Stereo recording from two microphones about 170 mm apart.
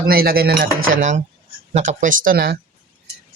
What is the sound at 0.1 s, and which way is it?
Speech, 60° right (ahead or behind).